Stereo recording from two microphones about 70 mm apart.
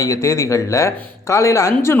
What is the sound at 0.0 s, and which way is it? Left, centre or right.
Speech, left.